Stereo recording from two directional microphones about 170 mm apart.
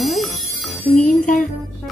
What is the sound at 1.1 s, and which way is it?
Speech, 50° left (ahead or behind).